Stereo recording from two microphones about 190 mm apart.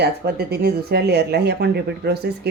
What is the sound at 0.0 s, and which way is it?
Speech, 60° right (ahead or behind).